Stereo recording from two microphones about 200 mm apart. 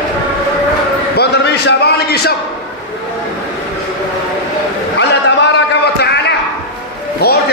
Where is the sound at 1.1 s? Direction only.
55° left (ahead or behind).